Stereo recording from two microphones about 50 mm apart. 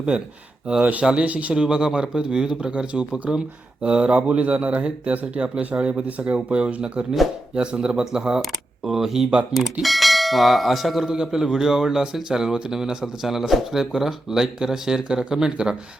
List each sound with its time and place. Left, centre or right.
0.1 s a man's voice: centre
1.5 s a man's voice: centre
9.8 s church bell: centre
11.1 s a man's voice: centre